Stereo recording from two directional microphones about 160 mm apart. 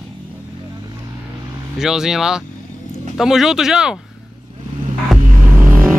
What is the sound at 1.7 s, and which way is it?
Speech, 5° right (ahead or behind).